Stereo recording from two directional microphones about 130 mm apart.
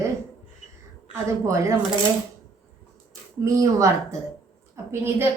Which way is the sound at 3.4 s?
25° right (ahead or behind).